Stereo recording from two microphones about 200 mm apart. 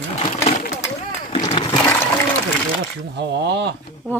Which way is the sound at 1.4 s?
25° left (ahead or behind).